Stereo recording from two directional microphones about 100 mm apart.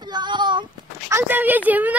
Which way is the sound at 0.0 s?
45° right (ahead or behind).